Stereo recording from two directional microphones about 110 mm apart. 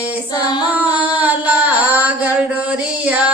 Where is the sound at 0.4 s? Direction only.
40° left (ahead or behind).